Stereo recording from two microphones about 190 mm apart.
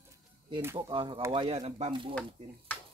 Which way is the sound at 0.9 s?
25° right (ahead or behind).